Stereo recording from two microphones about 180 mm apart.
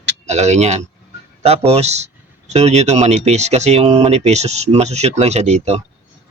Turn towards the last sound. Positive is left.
turn(degrees=-40)  # may be behind; listen again after turning